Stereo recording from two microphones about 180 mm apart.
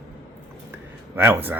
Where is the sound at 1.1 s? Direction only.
10° right (ahead or behind).